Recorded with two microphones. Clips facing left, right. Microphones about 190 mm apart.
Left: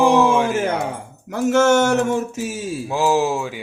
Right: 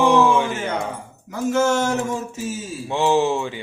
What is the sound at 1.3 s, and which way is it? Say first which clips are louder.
Speech: left 4 dB; 75° left (ahead or behind).